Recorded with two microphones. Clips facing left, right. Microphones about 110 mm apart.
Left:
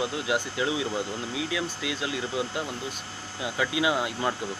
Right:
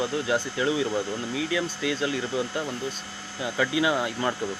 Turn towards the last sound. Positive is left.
turn(degrees=10)  # may be behind; listen again after turning